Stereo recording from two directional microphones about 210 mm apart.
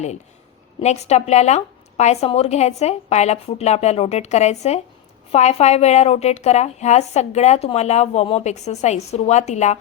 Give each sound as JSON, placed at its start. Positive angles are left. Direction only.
{"t": 0.8, "sound": "a woman's voice", "side_deg": 30}